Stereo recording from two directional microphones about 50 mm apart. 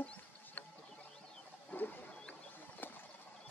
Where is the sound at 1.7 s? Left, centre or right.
Left.